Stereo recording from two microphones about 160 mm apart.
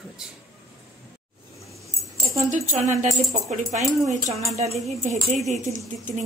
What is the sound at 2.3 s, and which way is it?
Speech, 45° right (ahead or behind).